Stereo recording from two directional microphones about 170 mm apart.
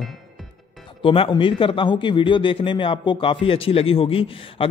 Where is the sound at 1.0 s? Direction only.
30° left (ahead or behind).